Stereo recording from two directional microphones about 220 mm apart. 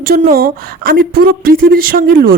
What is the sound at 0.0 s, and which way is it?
A woman's voice, 40° right (ahead or behind).